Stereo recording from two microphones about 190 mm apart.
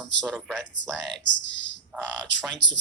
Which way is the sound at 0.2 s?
Centre (ahead or behind).